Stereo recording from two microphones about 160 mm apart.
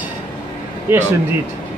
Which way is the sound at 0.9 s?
15° right (ahead or behind).